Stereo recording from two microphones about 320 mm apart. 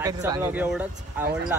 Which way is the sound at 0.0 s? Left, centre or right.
Centre.